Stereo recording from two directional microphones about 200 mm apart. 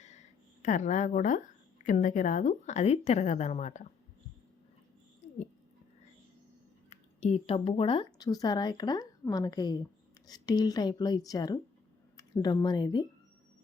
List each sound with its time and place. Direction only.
0.0 s a sound: 35° left (ahead or behind)
1.8 s a woman's voice: 40° left (ahead or behind)
6.9 s speech: 35° left (ahead or behind)